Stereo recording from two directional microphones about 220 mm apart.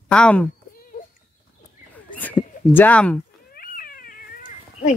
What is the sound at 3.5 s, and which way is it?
Cat, 40° left (ahead or behind).